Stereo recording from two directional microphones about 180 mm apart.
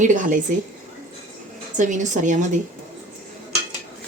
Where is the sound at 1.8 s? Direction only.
45° right (ahead or behind).